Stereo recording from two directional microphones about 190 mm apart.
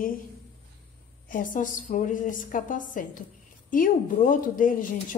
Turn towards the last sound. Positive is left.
turn(degrees=45)  # may be behind; listen again after turning